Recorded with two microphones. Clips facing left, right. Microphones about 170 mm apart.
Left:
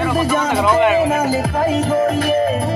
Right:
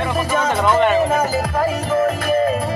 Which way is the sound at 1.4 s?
25° left (ahead or behind).